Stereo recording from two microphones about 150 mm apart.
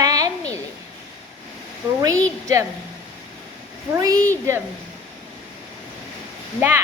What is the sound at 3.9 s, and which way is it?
Speech, 25° right (ahead or behind).